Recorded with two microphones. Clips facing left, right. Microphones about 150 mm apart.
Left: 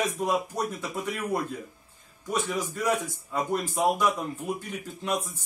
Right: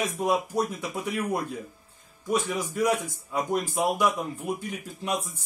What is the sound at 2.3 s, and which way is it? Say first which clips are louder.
A man's voice: right 2 dB; 10° right (ahead or behind).